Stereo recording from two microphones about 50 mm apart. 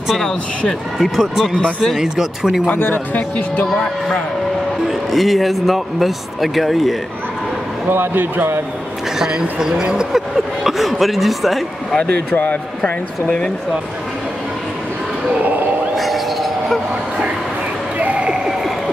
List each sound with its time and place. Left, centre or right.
0.1 s speech: centre
1.1 s a man's voice: centre
1.5 s speech: centre
2.0 s speech: centre
2.6 s speech: left
4.8 s a man's voice: centre
7.9 s speech: right
9.2 s speech: centre
12.3 s speech: left
16.0 s a sound: centre
17.9 s a sound: right